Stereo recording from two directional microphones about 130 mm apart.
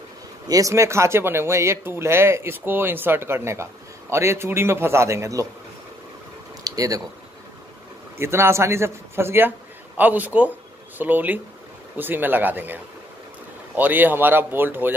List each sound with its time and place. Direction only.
0.5 s speech: 25° right (ahead or behind)
6.6 s a sound: 25° right (ahead or behind)
8.2 s speech: 20° right (ahead or behind)